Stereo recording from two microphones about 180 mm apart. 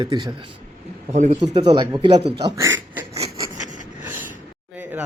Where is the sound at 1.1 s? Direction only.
40° right (ahead or behind).